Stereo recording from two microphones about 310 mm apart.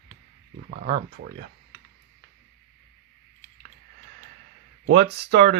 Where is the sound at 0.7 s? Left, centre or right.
Right.